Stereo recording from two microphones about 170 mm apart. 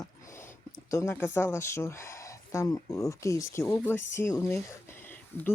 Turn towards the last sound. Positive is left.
turn(degrees=15)  # may be behind; listen again after turning